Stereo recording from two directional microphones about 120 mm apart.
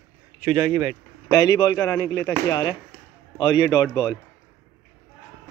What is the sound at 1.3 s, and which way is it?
Speech, 35° left (ahead or behind).